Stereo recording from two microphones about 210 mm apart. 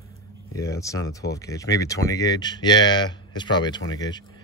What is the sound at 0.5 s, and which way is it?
Speech, 15° left (ahead or behind).